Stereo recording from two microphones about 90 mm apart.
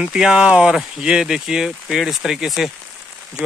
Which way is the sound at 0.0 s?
10° right (ahead or behind).